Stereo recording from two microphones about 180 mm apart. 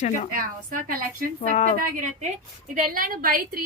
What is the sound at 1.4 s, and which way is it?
Speech, 40° left (ahead or behind).